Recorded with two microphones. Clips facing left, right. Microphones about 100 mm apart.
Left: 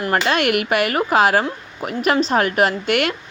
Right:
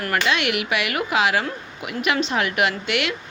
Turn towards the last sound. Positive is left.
turn(degrees=45)  # may be behind; listen again after turning